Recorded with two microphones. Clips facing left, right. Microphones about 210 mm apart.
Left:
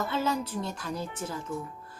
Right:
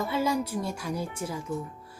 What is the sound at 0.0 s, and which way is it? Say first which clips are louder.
A woman's voice: right 2 dB; 10° right (ahead or behind).